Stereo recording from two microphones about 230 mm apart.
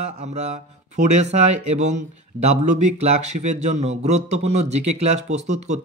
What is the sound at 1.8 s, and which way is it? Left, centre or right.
A man's voice, right.